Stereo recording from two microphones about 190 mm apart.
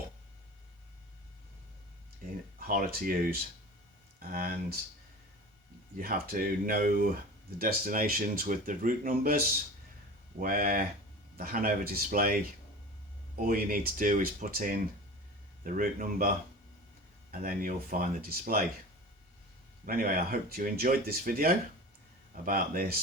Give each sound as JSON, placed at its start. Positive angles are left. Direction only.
{"t": 2.6, "sound": "speech", "side_deg": -50}
{"t": 6.0, "sound": "speech", "side_deg": -50}
{"t": 10.4, "sound": "speech", "side_deg": -50}
{"t": 13.4, "sound": "speech", "side_deg": -45}
{"t": 17.3, "sound": "speech", "side_deg": -50}
{"t": 19.8, "sound": "speech", "side_deg": -50}